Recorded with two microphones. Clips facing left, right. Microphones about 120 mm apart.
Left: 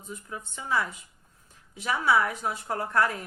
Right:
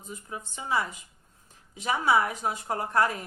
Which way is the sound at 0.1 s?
20° right (ahead or behind).